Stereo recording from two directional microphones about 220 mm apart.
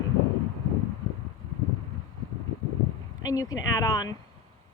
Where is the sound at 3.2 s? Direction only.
15° left (ahead or behind).